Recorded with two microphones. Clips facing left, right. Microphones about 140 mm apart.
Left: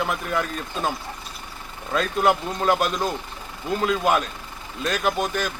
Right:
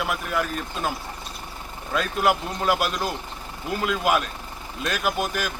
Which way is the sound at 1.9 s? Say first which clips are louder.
Left 2 dB; 5° right (ahead or behind).